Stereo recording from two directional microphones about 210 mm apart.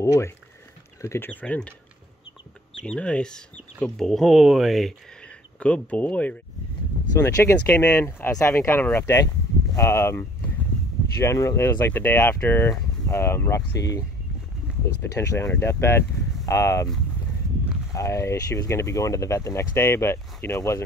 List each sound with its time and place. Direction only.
0.0 s speech: 15° left (ahead or behind)
2.8 s speech: 5° left (ahead or behind)
17.9 s speech: 15° left (ahead or behind)